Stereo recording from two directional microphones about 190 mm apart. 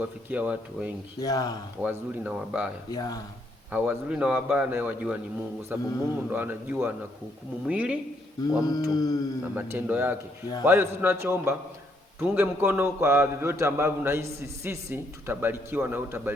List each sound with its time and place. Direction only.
0.0 s a man's voice: 10° right (ahead or behind)
1.2 s mantra: 20° left (ahead or behind)
1.8 s a man's voice: 10° right (ahead or behind)
2.9 s mantra: 20° left (ahead or behind)
3.7 s a man's voice: 10° right (ahead or behind)
8.4 s mantra: 20° left (ahead or behind)
9.6 s a man's voice: 10° right (ahead or behind)